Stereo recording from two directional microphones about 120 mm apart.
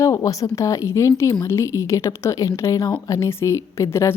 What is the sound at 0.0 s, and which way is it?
A woman's voice, 25° left (ahead or behind).